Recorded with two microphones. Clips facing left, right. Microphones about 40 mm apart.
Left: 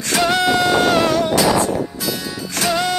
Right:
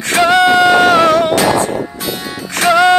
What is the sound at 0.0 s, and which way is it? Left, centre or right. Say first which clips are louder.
Music: right 7 dB; right.